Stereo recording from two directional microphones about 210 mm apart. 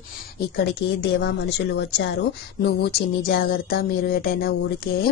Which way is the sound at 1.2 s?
55° left (ahead or behind).